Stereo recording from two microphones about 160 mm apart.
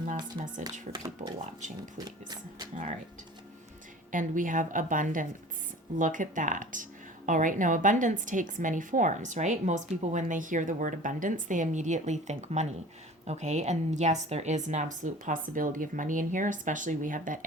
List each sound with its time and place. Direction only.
0.2 s speech: 25° right (ahead or behind)
4.1 s a woman's voice: 55° right (ahead or behind)